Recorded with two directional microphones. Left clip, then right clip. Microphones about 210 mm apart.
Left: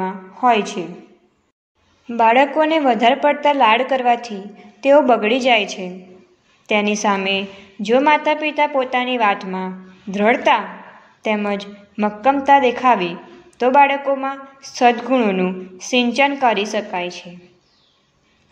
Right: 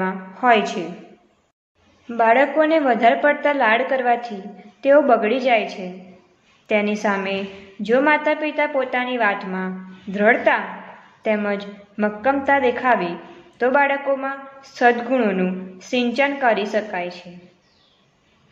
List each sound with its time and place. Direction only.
0.0 s a woman's voice: 25° left (ahead or behind)
2.0 s a woman's voice: 25° left (ahead or behind)